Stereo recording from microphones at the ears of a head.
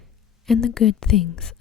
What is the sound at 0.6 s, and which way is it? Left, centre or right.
Speech, left.